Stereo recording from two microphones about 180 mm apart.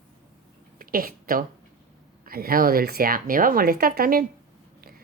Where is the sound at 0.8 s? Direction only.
50° right (ahead or behind).